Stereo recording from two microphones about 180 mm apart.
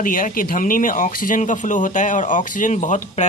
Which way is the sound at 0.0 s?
50° left (ahead or behind).